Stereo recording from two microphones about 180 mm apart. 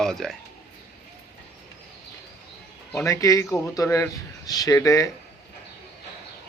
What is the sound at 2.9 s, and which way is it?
A man's voice, 15° left (ahead or behind).